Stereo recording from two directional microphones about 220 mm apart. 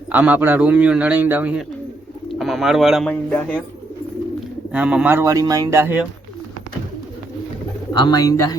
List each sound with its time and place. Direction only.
0.1 s a man's voice: 5° right (ahead or behind)
4.7 s a man's voice: 5° right (ahead or behind)
7.9 s speech: 20° left (ahead or behind)